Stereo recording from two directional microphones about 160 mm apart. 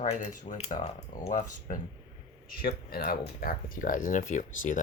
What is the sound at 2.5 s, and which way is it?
Speech, 65° left (ahead or behind).